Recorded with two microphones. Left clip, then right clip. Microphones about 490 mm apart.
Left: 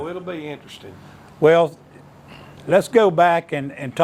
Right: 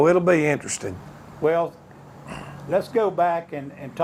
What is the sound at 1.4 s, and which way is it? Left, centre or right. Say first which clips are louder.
Speech: left 7 dB; left.